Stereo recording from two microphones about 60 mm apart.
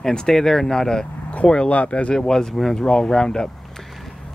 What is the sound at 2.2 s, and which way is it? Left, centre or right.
Speech, centre.